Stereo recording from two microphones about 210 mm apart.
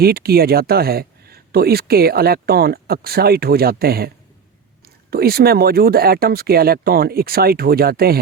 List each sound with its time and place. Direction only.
0.0 s speech: 45° right (ahead or behind)
5.1 s speech: 45° right (ahead or behind)